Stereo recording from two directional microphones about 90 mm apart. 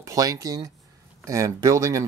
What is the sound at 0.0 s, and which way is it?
Speech, 40° right (ahead or behind).